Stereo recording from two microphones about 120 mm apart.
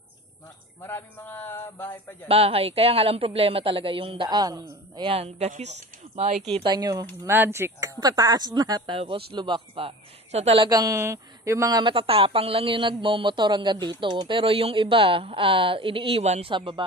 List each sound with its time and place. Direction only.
0.7 s a man's voice: 15° left (ahead or behind)
2.2 s speech: 55° right (ahead or behind); by 4.6 s 35° right (ahead or behind)
4.9 s speech: 50° right (ahead or behind)
6.6 s speech: 35° right (ahead or behind)
7.2 s speech: 20° right (ahead or behind)
8.0 s speech: 30° right (ahead or behind); by 10.6 s 55° right (ahead or behind)
10.6 s speech: 30° right (ahead or behind)
11.8 s speech: 50° right (ahead or behind)
16.5 s speech: 45° right (ahead or behind)